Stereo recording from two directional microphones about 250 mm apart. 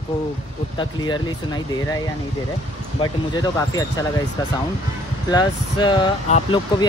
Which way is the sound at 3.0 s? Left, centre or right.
Left.